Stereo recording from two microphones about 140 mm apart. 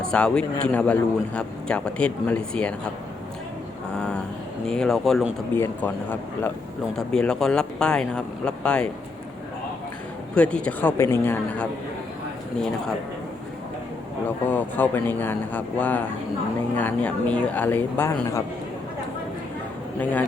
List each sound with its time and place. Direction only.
0.0 s speech: 5° left (ahead or behind)
3.9 s a sound: 10° left (ahead or behind)
4.6 s speech: 5° left (ahead or behind)
5.5 s speech: 15° left (ahead or behind)
10.3 s speech: 10° left (ahead or behind)
14.3 s a man's voice: 15° left (ahead or behind)